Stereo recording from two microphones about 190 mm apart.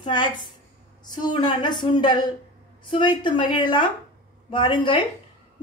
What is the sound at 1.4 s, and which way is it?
A woman's voice, 25° left (ahead or behind).